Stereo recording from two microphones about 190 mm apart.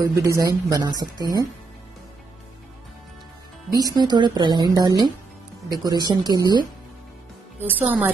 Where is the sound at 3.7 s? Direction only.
20° right (ahead or behind).